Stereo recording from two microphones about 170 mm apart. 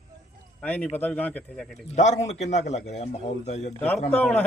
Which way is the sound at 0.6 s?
10° left (ahead or behind).